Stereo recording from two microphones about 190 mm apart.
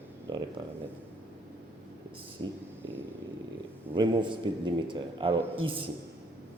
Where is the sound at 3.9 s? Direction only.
25° right (ahead or behind).